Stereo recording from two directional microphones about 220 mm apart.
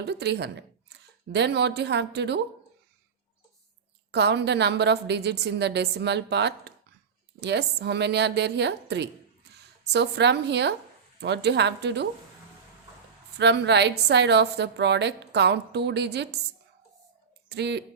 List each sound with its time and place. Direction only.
0.0 s speech: 50° right (ahead or behind)
4.1 s a woman's voice: 50° right (ahead or behind)
13.4 s a woman's voice: 50° right (ahead or behind)
17.5 s a woman's voice: 50° right (ahead or behind)